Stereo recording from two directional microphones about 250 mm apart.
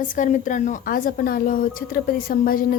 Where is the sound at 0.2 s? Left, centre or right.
Left.